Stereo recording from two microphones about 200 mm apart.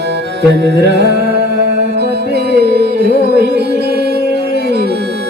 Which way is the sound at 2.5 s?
60° right (ahead or behind).